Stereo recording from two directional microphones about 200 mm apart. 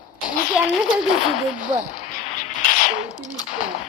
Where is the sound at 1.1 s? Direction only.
35° left (ahead or behind).